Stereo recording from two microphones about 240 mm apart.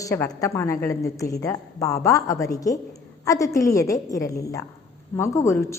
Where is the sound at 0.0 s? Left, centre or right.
Centre.